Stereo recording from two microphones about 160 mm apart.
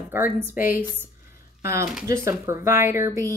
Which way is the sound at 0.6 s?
60° left (ahead or behind).